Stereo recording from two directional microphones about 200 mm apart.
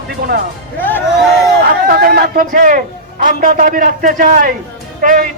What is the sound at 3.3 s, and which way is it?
A man's voice, 40° right (ahead or behind).